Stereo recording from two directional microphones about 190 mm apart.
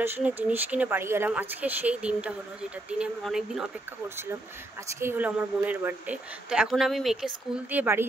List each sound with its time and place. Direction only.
0.0 s a woman's voice: 10° right (ahead or behind)
5.0 s a woman's voice: 10° right (ahead or behind)